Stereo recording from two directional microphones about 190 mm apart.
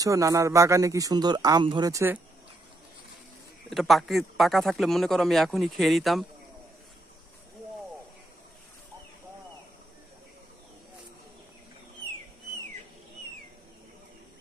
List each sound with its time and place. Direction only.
0.0 s speech: 15° right (ahead or behind)
3.7 s speech: centre (ahead or behind)